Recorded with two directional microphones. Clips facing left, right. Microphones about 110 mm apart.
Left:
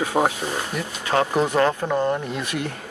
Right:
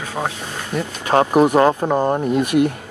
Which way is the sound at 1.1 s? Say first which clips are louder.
Right 5 dB; 50° right (ahead or behind).